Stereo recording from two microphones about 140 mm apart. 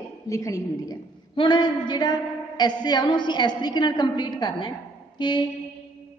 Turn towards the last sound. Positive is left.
turn(degrees=35)  # may be behind; listen again after turning